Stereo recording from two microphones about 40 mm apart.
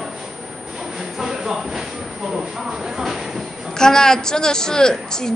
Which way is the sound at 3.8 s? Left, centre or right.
Centre.